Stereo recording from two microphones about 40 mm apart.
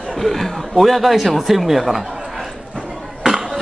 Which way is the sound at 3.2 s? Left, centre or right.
Centre.